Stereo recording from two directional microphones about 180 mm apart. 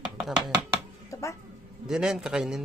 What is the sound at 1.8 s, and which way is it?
Speech, centre (ahead or behind).